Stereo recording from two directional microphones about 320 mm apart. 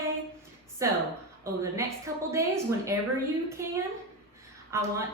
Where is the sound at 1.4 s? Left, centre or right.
Centre.